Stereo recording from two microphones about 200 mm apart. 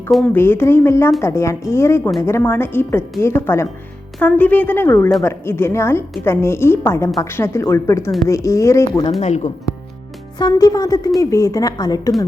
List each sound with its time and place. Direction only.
0.3 s a woman's voice: 10° left (ahead or behind)
9.2 s speech: 35° left (ahead or behind)
10.3 s a woman's voice: 20° left (ahead or behind)